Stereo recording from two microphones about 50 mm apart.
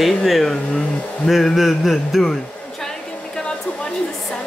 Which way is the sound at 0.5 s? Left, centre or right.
Centre.